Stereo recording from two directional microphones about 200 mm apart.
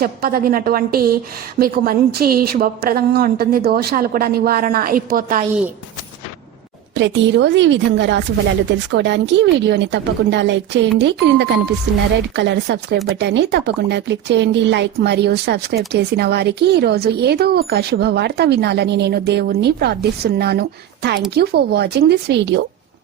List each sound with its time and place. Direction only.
0.0 s a woman's voice: 45° right (ahead or behind)
6.9 s speech: 65° right (ahead or behind)